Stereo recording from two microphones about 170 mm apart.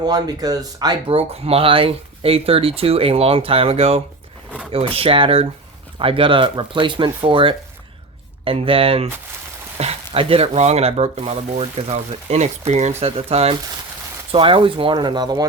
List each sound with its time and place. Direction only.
0.0 s speech: 25° right (ahead or behind)